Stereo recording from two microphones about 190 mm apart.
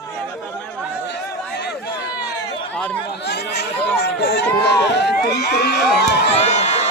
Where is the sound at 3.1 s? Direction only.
60° left (ahead or behind).